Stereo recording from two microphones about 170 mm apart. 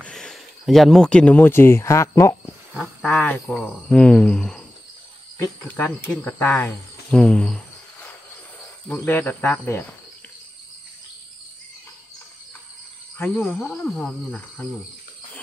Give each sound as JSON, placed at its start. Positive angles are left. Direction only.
{"t": 0.0, "sound": "speech", "side_deg": 5}
{"t": 2.7, "sound": "wild animals", "side_deg": 0}
{"t": 3.1, "sound": "speech", "side_deg": 5}
{"t": 8.8, "sound": "speech", "side_deg": 10}
{"t": 13.2, "sound": "speech", "side_deg": 10}